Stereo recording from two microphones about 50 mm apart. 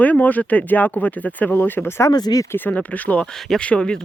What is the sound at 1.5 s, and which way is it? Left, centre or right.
Speech, left.